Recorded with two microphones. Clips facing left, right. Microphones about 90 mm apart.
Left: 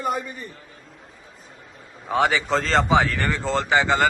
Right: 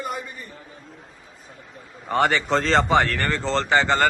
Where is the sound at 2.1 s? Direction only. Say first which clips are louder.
Even; 5° left (ahead or behind).